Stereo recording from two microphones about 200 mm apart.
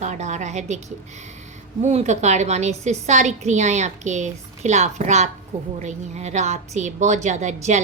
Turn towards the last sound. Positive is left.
turn(degrees=-35)  # may be behind; listen again after turning